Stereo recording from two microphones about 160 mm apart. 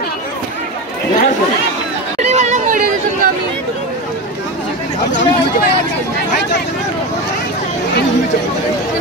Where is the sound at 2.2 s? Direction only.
45° right (ahead or behind); by 3.3 s 60° right (ahead or behind).